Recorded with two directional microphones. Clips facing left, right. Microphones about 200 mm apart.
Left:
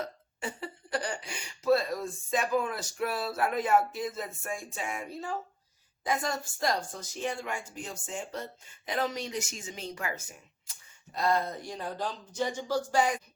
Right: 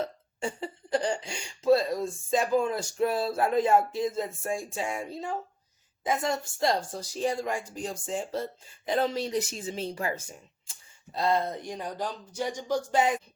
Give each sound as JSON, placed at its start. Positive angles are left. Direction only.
{"t": 0.0, "sound": "a woman's voice", "side_deg": -30}